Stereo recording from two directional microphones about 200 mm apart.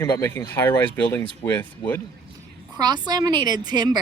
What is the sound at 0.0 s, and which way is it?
Speech, 15° left (ahead or behind).